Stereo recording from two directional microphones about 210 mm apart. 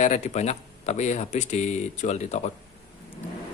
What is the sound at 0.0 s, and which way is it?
Speech, 35° left (ahead or behind).